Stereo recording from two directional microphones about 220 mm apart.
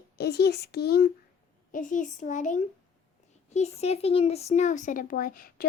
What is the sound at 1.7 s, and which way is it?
Speech, 35° left (ahead or behind).